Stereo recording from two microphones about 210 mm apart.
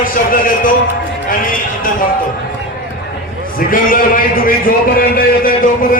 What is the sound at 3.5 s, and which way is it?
A man's voice, 40° left (ahead or behind).